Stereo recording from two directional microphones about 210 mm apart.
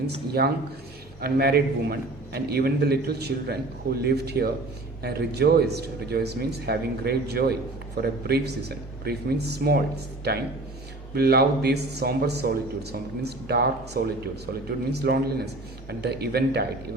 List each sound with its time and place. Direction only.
0.4 s a man's voice: 50° right (ahead or behind)